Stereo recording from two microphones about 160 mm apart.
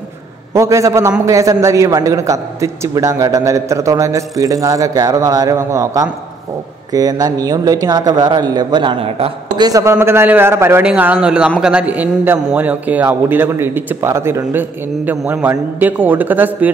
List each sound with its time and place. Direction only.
0.5 s a man's voice: 20° right (ahead or behind)
9.7 s a man's voice: 20° right (ahead or behind)